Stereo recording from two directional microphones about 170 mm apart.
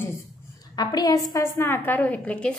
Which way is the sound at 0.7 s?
25° left (ahead or behind).